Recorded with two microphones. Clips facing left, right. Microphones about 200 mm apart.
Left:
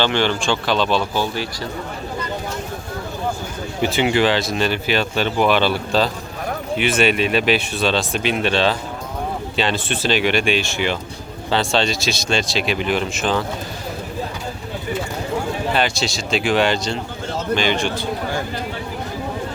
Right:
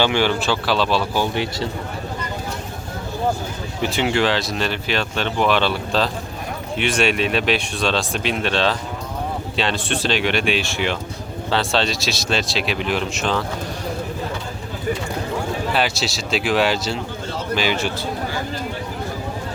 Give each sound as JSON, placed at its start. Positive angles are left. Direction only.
{"t": 0.0, "sound": "speech", "side_deg": -10}
{"t": 1.2, "sound": "a man's voice", "side_deg": -20}
{"t": 3.8, "sound": "speech", "side_deg": 0}
{"t": 15.7, "sound": "speech", "side_deg": -5}